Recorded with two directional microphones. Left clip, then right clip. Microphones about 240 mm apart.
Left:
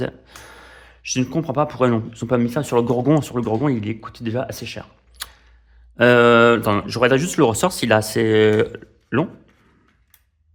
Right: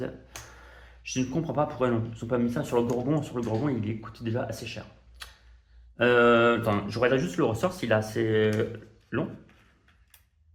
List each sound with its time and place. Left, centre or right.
0.0 s speech: left